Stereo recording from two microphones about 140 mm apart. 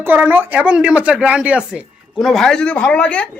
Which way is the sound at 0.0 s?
15° right (ahead or behind).